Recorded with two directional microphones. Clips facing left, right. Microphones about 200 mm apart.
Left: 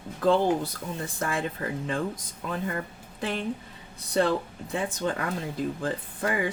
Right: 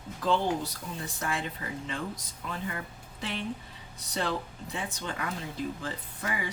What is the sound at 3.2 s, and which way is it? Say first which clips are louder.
Speech: left 5 dB; 50° left (ahead or behind).